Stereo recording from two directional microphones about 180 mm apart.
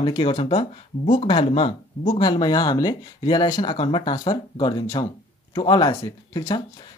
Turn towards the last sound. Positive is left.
turn(degrees=20)  # may be behind; listen again after turning